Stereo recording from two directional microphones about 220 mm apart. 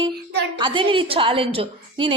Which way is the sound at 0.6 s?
20° right (ahead or behind).